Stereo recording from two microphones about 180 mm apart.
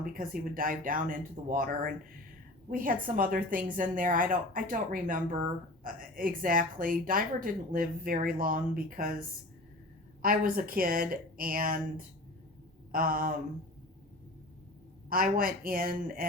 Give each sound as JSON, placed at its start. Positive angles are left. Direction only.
{"t": 0.0, "sound": "speech", "side_deg": -50}
{"t": 15.1, "sound": "speech", "side_deg": -50}